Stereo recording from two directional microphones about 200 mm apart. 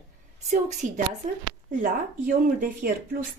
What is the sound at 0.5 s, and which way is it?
A woman's voice, 35° right (ahead or behind).